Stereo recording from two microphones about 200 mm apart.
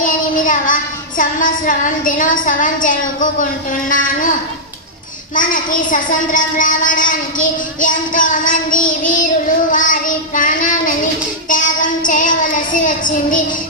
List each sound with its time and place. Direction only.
0.0 s a child's voice: 40° left (ahead or behind)
5.3 s a child's voice: 40° left (ahead or behind)
11.4 s child singing: 40° left (ahead or behind)